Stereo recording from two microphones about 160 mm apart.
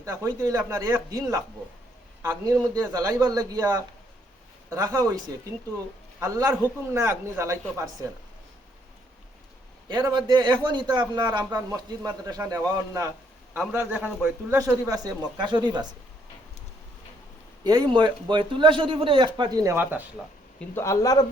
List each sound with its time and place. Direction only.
0.0 s a man's voice: 20° right (ahead or behind)
9.9 s a man's voice: 25° right (ahead or behind); by 14.6 s 10° right (ahead or behind)
14.6 s a man's voice: 20° right (ahead or behind)
17.6 s a man's voice: 25° right (ahead or behind)
19.7 s a man's voice: 10° right (ahead or behind)
20.6 s a man's voice: 15° left (ahead or behind)